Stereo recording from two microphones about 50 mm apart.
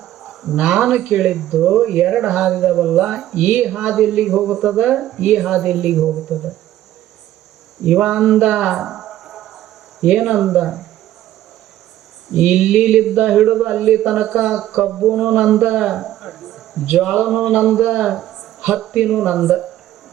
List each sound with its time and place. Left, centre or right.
0.0 s cricket: centre
0.6 s speech: centre
7.8 s speech: centre
8.1 s a sound: centre
10.0 s speech: centre
12.3 s speech: centre
13.0 s speech: centre
15.0 s a sound: right
15.8 s a man's voice: centre